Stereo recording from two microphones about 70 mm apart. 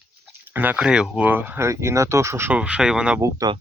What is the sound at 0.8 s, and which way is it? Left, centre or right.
Speech, centre.